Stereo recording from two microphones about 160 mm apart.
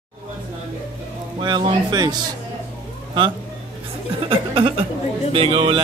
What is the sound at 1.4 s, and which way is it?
Speech, 30° right (ahead or behind).